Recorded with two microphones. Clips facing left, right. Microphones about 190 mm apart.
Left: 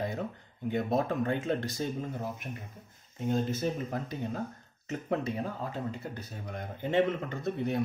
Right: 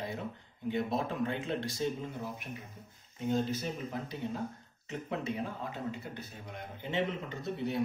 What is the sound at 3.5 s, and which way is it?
Speech, 50° left (ahead or behind).